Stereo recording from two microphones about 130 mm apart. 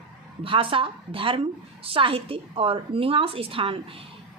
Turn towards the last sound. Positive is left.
turn(degrees=-45)  # may be behind; listen again after turning